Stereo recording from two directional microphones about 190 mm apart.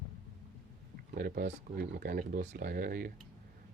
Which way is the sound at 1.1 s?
55° right (ahead or behind).